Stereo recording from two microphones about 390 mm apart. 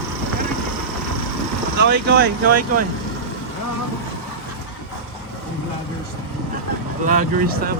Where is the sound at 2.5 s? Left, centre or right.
Right.